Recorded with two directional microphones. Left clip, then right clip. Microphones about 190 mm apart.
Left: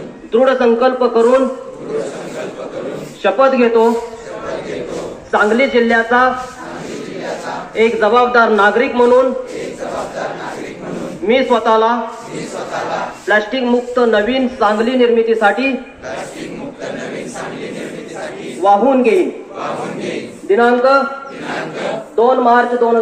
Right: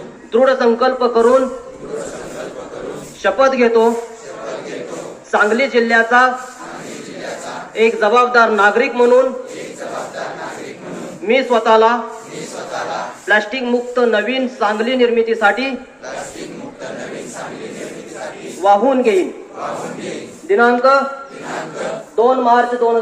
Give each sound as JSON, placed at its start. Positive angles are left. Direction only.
{"t": 0.3, "sound": "speech", "side_deg": 30}
{"t": 3.2, "sound": "speech", "side_deg": 25}
{"t": 5.3, "sound": "a man's voice", "side_deg": 15}
{"t": 7.7, "sound": "a man's voice", "side_deg": 10}
{"t": 11.2, "sound": "a man's voice", "side_deg": 15}
{"t": 13.3, "sound": "speech", "side_deg": 20}
{"t": 18.6, "sound": "a man's voice", "side_deg": 35}
{"t": 20.5, "sound": "a man's voice", "side_deg": 35}
{"t": 22.1, "sound": "a man's voice", "side_deg": 40}